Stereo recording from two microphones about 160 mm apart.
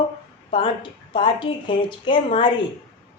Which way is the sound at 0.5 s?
35° left (ahead or behind).